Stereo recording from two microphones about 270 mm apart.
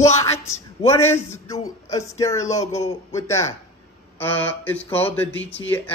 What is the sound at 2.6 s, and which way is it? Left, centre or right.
Speech, left.